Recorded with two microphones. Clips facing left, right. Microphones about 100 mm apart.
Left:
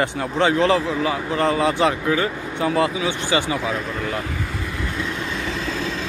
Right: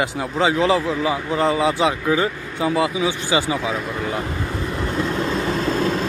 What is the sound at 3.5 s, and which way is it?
Vehicle, 5° right (ahead or behind).